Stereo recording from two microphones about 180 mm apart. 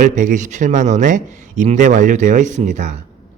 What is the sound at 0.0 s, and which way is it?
Speech, 45° right (ahead or behind).